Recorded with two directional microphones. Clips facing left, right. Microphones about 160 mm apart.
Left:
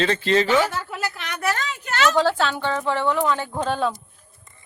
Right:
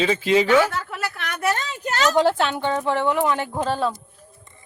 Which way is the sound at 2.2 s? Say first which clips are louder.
Right 2 dB; 20° right (ahead or behind).